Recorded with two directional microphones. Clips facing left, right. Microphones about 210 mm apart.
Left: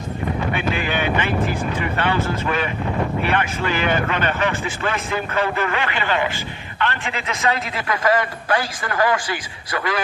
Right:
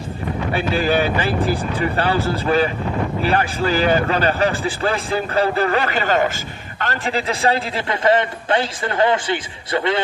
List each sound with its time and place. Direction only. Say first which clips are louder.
0.5 s a man's voice: right 4 dB; 35° right (ahead or behind)